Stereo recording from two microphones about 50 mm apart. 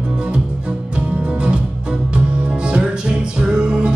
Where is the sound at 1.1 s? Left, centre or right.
Right.